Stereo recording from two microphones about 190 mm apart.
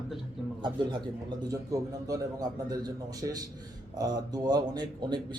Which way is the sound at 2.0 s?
20° right (ahead or behind).